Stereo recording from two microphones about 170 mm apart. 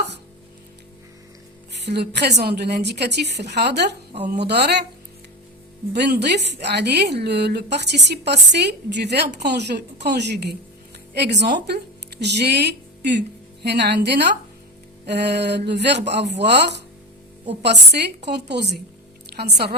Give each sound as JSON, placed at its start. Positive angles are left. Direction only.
{"t": 1.7, "sound": "a woman's voice", "side_deg": -80}
{"t": 5.9, "sound": "a woman's voice", "side_deg": -80}